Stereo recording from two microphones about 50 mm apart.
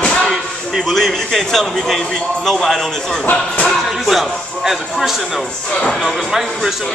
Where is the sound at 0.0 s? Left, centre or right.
Left.